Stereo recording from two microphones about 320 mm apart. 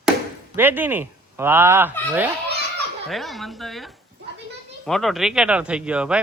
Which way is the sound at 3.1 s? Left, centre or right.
Centre.